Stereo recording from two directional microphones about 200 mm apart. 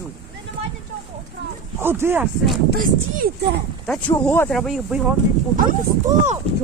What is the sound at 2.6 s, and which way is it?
Speech, 50° right (ahead or behind).